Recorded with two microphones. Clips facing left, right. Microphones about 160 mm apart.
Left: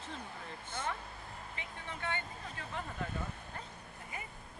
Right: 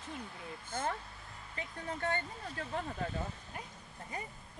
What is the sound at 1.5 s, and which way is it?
Speech, 40° right (ahead or behind).